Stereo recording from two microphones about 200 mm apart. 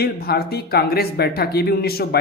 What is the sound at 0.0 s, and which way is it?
Speech, 50° left (ahead or behind).